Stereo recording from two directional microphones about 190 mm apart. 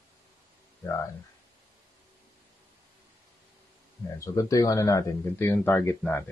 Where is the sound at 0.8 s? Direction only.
15° left (ahead or behind).